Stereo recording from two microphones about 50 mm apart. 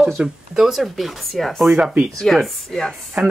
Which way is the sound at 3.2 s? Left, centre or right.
Right.